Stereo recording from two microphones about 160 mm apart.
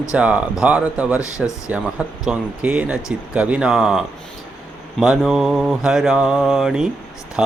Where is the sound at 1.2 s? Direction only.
20° left (ahead or behind).